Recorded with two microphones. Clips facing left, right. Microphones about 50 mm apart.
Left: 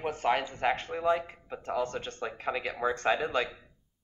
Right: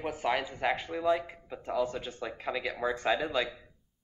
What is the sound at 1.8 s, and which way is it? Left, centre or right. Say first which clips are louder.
Speech: even; centre.